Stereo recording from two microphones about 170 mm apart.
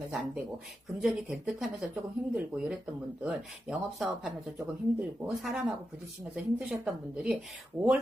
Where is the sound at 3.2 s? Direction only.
Centre (ahead or behind).